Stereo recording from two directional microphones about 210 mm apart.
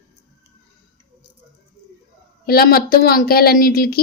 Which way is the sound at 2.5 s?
45° left (ahead or behind).